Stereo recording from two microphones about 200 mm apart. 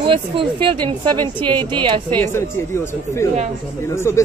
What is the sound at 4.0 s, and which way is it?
Speech, 15° left (ahead or behind).